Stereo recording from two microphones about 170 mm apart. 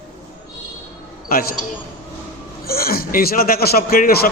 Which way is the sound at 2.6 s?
60° left (ahead or behind).